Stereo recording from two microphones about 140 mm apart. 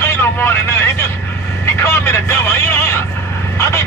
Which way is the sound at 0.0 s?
15° left (ahead or behind).